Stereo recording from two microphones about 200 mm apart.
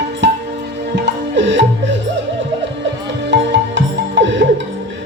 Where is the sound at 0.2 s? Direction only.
65° right (ahead or behind).